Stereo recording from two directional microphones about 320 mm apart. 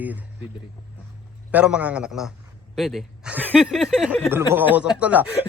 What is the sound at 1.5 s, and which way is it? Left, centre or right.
A man's voice, centre.